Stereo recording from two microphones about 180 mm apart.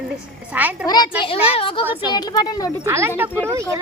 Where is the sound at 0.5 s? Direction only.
10° right (ahead or behind).